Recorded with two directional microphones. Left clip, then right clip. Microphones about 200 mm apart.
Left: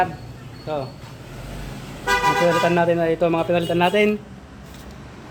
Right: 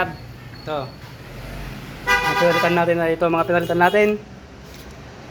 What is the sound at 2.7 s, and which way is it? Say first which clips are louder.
Speech: even; 20° left (ahead or behind).